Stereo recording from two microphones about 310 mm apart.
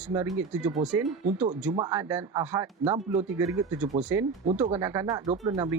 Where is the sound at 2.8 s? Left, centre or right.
Centre.